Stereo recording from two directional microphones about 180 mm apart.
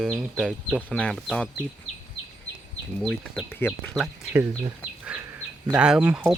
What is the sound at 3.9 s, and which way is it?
Speech, 5° right (ahead or behind).